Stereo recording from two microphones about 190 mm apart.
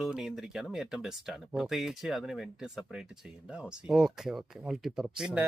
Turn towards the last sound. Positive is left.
turn(degrees=-5)  # may be behind; listen again after turning